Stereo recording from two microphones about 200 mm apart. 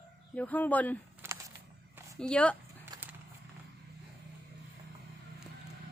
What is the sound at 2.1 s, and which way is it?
Speech, 5° left (ahead or behind).